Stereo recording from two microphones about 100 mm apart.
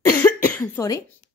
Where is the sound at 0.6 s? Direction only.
30° left (ahead or behind).